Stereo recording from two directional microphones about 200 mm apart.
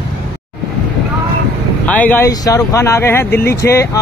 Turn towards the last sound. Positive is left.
turn(degrees=15)  # may be behind; listen again after turning